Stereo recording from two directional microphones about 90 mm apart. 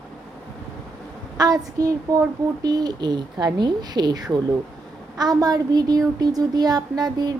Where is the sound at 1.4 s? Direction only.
45° right (ahead or behind).